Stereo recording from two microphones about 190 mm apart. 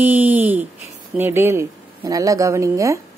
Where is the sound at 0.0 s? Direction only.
10° right (ahead or behind).